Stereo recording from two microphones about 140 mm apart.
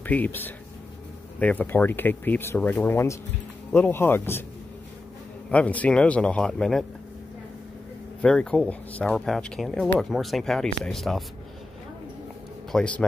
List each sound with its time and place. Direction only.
0.0 s speech: 10° left (ahead or behind)
5.5 s speech: 10° left (ahead or behind)
8.2 s speech: 5° left (ahead or behind)
12.7 s speech: 10° left (ahead or behind)